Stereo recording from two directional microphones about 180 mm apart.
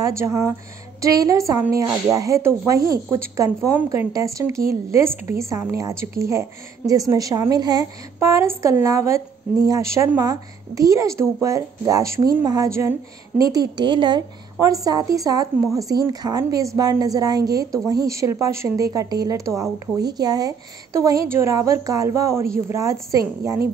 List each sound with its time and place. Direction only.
0.0 s a woman's voice: 15° right (ahead or behind)